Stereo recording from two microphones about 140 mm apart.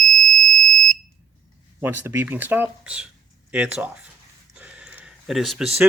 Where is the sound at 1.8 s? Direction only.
15° right (ahead or behind).